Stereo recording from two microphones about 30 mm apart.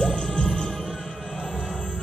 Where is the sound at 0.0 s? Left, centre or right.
Left.